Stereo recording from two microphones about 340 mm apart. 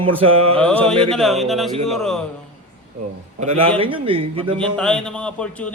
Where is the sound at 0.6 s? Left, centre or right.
Centre.